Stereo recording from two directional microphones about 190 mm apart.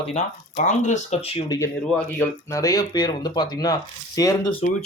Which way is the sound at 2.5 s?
20° left (ahead or behind).